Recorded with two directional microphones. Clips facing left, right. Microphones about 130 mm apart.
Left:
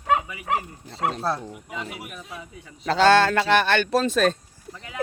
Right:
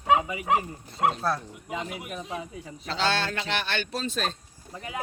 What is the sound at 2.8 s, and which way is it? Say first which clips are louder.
Speech: left 10 dB; 50° left (ahead or behind).